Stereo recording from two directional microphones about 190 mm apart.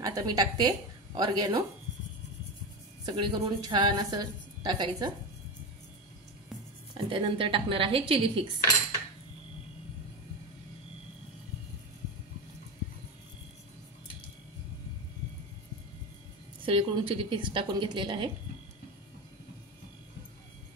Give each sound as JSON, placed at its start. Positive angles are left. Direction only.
{"t": 0.0, "sound": "a woman's voice", "side_deg": -20}
{"t": 3.1, "sound": "a woman's voice", "side_deg": -25}
{"t": 6.9, "sound": "a woman's voice", "side_deg": -25}
{"t": 16.6, "sound": "a woman's voice", "side_deg": -30}